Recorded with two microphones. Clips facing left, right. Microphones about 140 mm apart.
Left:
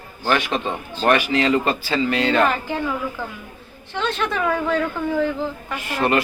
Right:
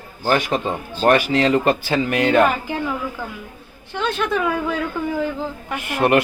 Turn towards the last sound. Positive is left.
turn(degrees=-60)  # may be behind; listen again after turning